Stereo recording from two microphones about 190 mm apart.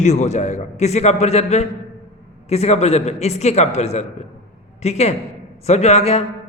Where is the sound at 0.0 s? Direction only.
35° left (ahead or behind).